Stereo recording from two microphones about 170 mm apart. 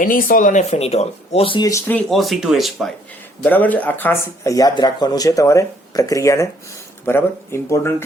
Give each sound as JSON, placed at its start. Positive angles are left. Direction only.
{"t": 0.0, "sound": "speech", "side_deg": 55}
{"t": 1.9, "sound": "speech", "side_deg": 5}